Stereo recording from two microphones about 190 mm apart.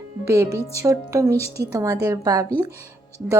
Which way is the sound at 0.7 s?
15° right (ahead or behind).